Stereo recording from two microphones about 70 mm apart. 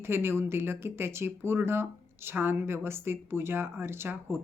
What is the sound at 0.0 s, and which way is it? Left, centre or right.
Speech, right.